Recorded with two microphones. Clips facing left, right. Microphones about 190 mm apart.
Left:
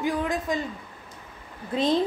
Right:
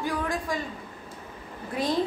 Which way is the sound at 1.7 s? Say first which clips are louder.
Left 4 dB; 25° left (ahead or behind).